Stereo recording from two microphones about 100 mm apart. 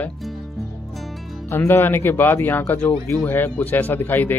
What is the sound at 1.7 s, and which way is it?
A man's voice, 25° left (ahead or behind).